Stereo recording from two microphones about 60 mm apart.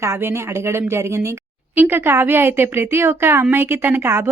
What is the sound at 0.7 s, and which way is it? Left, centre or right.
Speech, right.